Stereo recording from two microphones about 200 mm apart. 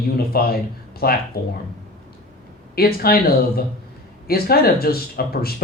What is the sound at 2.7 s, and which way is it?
Speech, 50° left (ahead or behind).